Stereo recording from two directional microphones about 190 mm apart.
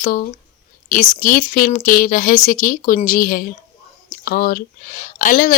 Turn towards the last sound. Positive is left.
turn(degrees=45)  # may be behind; listen again after turning